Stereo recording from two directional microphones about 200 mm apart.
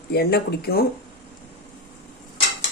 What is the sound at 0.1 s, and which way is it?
Speech, 55° left (ahead or behind).